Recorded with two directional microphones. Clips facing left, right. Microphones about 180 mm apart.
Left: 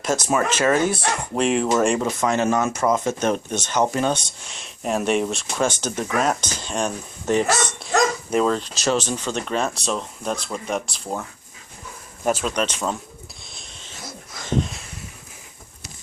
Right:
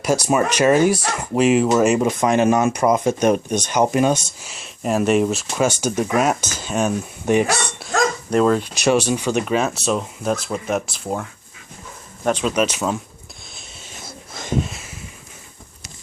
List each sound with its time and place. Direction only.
0.3 s speech: 15° right (ahead or behind)
1.4 s speech: 5° right (ahead or behind)
8.3 s speech: centre (ahead or behind)
8.5 s speech: 10° right (ahead or behind); by 12.5 s 5° left (ahead or behind)
12.5 s speech: 5° right (ahead or behind)
14.5 s speech: 5° right (ahead or behind)